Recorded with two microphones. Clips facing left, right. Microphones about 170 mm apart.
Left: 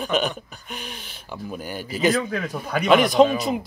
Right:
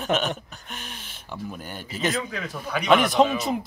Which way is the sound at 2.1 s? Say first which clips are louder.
Left 7 dB; 45° left (ahead or behind).